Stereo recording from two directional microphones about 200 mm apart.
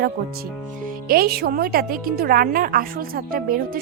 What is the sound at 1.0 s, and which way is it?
A woman's voice, 50° right (ahead or behind).